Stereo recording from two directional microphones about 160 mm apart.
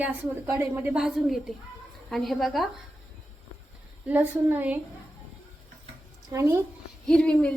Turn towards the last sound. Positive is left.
turn(degrees=5)  # may be behind; listen again after turning